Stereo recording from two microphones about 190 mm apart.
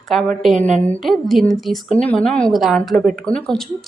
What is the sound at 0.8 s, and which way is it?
Speech, 5° left (ahead or behind).